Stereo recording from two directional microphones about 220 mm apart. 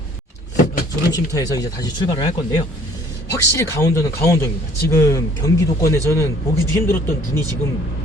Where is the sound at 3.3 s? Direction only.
15° left (ahead or behind).